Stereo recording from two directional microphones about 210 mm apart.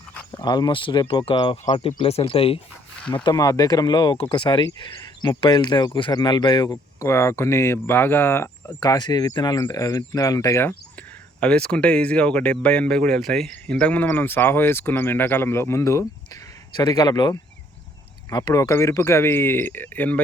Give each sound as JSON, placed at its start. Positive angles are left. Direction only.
{"t": 0.1, "sound": "a sound", "side_deg": 5}
{"t": 0.4, "sound": "speech", "side_deg": 20}
{"t": 3.0, "sound": "speech", "side_deg": 5}
{"t": 3.2, "sound": "speech", "side_deg": 15}